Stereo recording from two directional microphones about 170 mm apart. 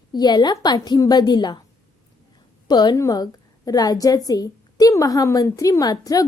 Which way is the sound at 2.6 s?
25° left (ahead or behind).